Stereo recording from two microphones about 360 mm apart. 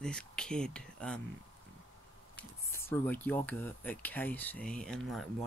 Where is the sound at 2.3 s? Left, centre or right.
Centre.